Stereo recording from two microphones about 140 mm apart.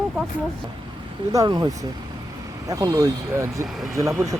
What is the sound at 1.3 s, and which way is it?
Speech, 25° right (ahead or behind).